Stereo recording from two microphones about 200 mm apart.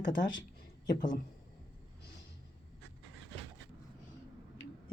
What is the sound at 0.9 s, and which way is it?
Speech, 20° left (ahead or behind).